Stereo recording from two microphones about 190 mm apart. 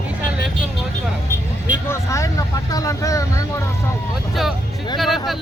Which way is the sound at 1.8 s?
15° left (ahead or behind).